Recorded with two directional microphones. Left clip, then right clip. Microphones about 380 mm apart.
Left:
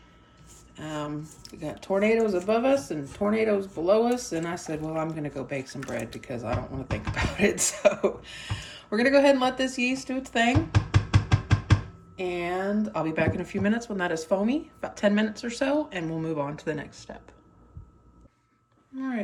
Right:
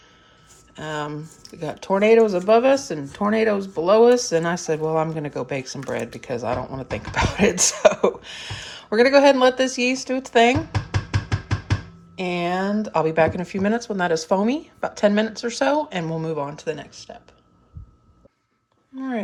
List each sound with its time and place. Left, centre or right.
0.8 s speech: centre
12.1 s speech: centre